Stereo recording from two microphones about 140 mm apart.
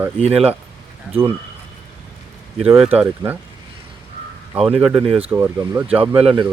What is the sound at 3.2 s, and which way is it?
Speech, 25° right (ahead or behind).